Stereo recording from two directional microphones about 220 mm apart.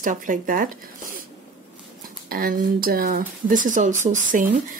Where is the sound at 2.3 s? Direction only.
40° right (ahead or behind).